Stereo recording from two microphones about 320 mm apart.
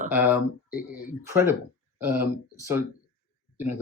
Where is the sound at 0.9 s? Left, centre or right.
Centre.